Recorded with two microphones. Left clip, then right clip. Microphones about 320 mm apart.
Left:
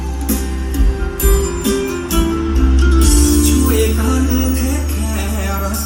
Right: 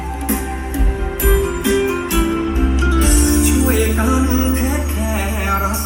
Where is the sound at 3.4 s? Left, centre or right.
Centre.